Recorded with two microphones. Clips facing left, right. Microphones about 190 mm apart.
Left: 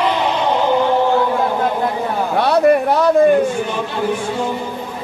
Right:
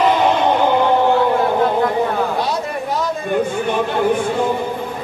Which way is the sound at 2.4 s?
65° left (ahead or behind).